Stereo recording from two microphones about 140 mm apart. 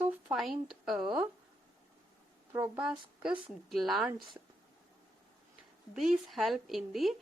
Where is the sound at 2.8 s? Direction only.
5° right (ahead or behind).